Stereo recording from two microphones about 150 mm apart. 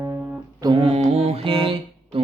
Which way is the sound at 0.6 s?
30° right (ahead or behind).